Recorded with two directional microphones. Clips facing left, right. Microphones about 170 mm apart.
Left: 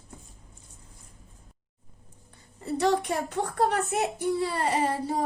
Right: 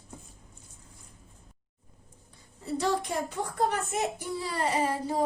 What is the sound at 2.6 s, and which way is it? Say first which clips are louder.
Speech: left 4 dB; 65° left (ahead or behind).